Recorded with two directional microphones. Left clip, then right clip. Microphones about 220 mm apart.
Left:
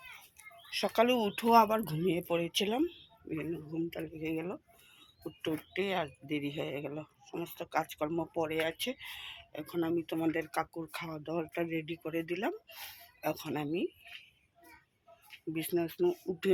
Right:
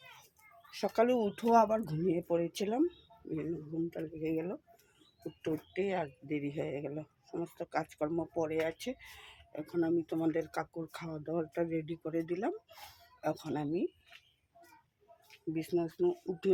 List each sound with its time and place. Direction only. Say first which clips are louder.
0.9 s speech: left 1 dB; centre (ahead or behind)
15.5 s speech: left 1 dB; 5° left (ahead or behind)
15.9 s speech: left 1 dB; 20° left (ahead or behind)